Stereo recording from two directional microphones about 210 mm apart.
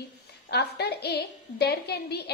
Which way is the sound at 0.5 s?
50° left (ahead or behind).